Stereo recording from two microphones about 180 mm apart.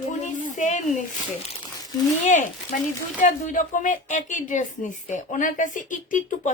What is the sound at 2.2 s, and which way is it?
Speech, 45° left (ahead or behind).